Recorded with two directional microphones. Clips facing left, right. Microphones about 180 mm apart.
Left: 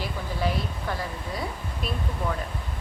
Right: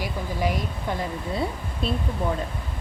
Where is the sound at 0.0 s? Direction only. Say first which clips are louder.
Right 2 dB; 15° right (ahead or behind).